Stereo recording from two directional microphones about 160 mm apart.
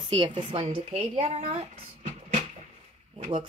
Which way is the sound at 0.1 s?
30° right (ahead or behind).